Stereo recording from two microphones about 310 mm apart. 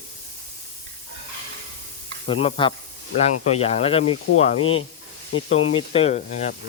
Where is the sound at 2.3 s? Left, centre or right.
Centre.